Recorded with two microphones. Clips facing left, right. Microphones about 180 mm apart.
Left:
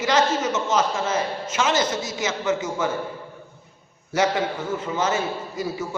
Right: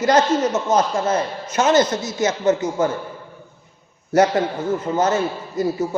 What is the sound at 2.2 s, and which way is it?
Speech, 40° right (ahead or behind).